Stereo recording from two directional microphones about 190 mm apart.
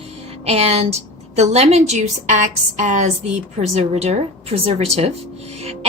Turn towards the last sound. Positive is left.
turn(degrees=-30)  # may be behind; listen again after turning